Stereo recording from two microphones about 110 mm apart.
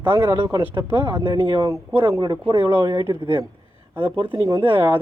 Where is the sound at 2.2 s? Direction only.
45° right (ahead or behind).